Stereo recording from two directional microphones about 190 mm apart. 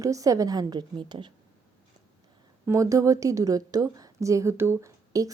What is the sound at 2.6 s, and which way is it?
A woman's voice, 15° right (ahead or behind).